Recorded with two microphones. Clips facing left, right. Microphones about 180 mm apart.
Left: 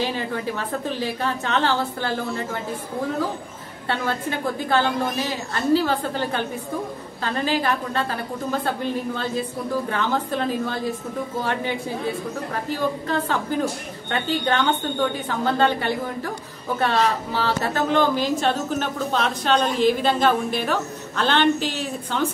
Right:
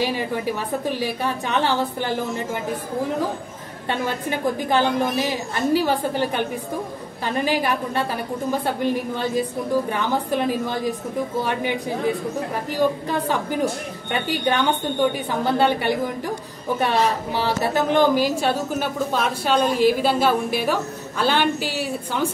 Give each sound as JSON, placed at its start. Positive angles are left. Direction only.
{"t": 0.0, "sound": "a woman's voice", "side_deg": -10}
{"t": 3.9, "sound": "a woman's voice", "side_deg": -15}
{"t": 13.1, "sound": "a woman's voice", "side_deg": -15}